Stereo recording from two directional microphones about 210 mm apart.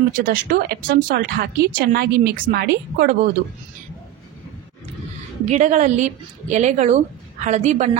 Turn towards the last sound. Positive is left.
turn(degrees=-30)  # may be behind; listen again after turning